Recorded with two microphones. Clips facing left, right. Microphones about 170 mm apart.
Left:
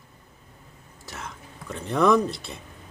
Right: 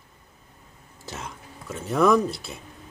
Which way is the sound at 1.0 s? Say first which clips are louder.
Right 2 dB; 25° right (ahead or behind).